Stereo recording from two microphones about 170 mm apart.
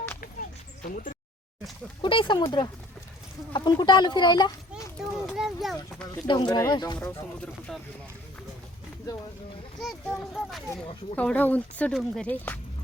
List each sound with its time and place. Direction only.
0.9 s speech: 50° left (ahead or behind)
2.0 s speech: 30° left (ahead or behind)
5.1 s speech: centre (ahead or behind)
6.2 s speech: 25° left (ahead or behind)
7.7 s speech: centre (ahead or behind)
9.8 s speech: centre (ahead or behind)